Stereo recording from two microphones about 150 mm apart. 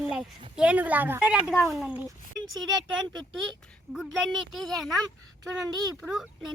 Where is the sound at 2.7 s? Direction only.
30° right (ahead or behind).